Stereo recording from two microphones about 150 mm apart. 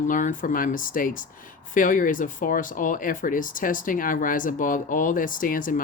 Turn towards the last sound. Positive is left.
turn(degrees=65)  # may be behind; listen again after turning